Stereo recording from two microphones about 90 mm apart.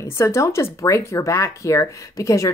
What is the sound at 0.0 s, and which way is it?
Speech, 30° left (ahead or behind).